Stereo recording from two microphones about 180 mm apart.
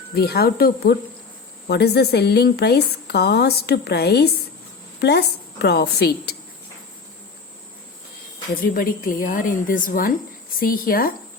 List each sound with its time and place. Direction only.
0.1 s a woman's voice: 60° left (ahead or behind)
8.6 s a woman's voice: 50° left (ahead or behind)